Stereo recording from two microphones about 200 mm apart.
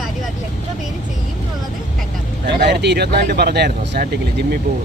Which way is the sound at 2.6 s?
55° right (ahead or behind).